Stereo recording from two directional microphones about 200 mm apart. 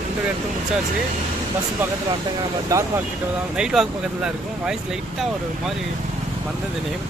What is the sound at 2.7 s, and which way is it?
Speech, 15° right (ahead or behind).